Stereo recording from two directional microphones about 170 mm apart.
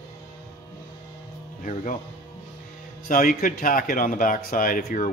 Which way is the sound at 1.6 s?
50° left (ahead or behind).